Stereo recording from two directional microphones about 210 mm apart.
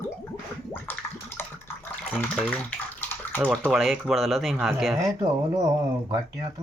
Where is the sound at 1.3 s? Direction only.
10° left (ahead or behind).